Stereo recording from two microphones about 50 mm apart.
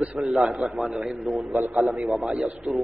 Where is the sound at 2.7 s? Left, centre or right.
Right.